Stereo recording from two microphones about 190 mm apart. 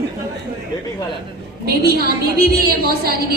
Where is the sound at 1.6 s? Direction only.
55° right (ahead or behind).